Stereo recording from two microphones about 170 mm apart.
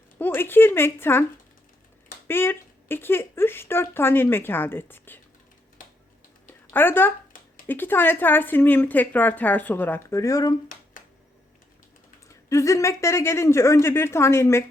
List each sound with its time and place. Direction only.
0.2 s speech: 10° left (ahead or behind)
2.2 s speech: 15° left (ahead or behind)
6.5 s a sound: 10° left (ahead or behind)
7.7 s speech: 10° left (ahead or behind)
12.5 s speech: 20° left (ahead or behind)